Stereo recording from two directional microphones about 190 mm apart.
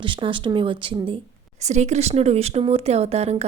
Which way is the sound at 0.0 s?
25° right (ahead or behind).